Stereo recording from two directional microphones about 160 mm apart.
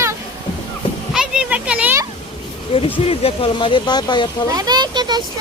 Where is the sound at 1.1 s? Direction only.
5° right (ahead or behind).